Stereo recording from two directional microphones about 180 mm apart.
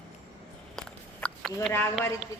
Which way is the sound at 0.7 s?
5° left (ahead or behind).